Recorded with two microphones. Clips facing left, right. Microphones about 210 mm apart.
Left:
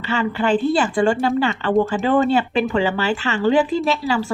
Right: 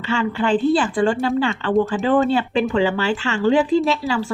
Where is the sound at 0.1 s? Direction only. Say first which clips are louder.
Even; 5° left (ahead or behind).